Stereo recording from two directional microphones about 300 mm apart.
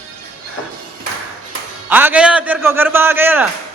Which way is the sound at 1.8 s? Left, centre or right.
Centre.